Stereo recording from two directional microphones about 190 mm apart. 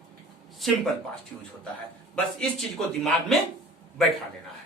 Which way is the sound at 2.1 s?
5° left (ahead or behind).